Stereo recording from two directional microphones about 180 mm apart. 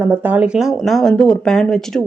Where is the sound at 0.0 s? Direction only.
10° right (ahead or behind).